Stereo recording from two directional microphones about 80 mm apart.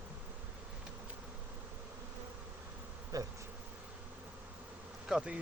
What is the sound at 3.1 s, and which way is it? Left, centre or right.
Bee, right.